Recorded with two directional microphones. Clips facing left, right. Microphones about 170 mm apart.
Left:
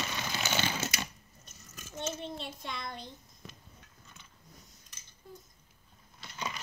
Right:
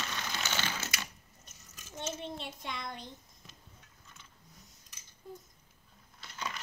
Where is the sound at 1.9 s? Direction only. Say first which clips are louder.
Left 2 dB; 15° right (ahead or behind).